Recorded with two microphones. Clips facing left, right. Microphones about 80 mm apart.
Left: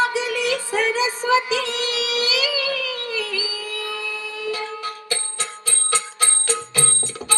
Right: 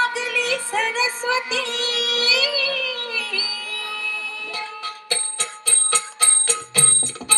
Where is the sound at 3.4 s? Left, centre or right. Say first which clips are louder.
Left 3 dB; left.